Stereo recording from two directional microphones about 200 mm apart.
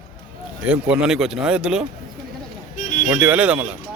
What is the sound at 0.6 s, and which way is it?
Speech, 5° right (ahead or behind).